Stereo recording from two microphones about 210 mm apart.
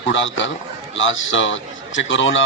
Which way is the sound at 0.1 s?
65° left (ahead or behind).